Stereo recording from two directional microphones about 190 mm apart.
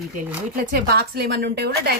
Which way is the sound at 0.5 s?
55° right (ahead or behind).